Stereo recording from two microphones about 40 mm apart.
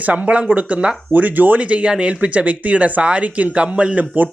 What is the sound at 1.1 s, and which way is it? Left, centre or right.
Speech, right.